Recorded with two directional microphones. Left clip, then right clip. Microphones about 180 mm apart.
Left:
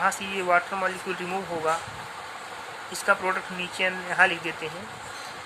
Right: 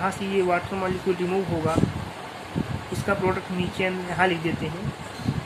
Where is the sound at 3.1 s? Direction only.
20° left (ahead or behind).